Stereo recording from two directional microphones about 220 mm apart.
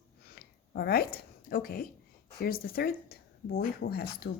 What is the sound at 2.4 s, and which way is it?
Speech, 45° left (ahead or behind).